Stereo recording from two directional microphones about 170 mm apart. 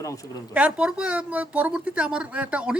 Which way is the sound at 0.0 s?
20° left (ahead or behind).